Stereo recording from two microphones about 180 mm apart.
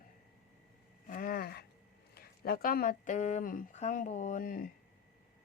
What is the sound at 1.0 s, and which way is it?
A woman's voice, 50° left (ahead or behind).